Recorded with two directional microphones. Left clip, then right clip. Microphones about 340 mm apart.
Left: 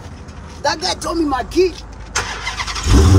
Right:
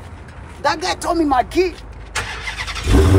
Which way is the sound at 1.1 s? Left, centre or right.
Centre.